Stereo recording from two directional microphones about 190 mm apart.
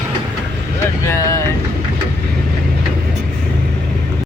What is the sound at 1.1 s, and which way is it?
Vehicle, 15° left (ahead or behind).